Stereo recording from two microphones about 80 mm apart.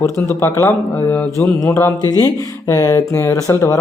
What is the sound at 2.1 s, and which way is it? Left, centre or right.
Speech, left.